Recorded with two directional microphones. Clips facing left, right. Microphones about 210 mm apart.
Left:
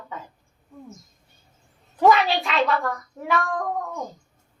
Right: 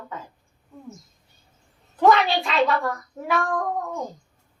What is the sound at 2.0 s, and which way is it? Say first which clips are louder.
Speech: even; centre (ahead or behind).